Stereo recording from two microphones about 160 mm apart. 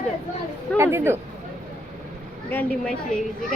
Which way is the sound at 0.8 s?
15° right (ahead or behind).